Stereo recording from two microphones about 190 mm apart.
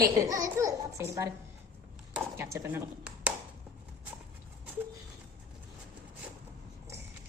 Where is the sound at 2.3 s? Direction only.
15° right (ahead or behind).